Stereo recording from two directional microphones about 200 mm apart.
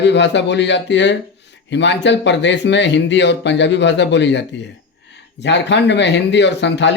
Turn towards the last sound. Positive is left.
turn(degrees=60)  # may be behind; listen again after turning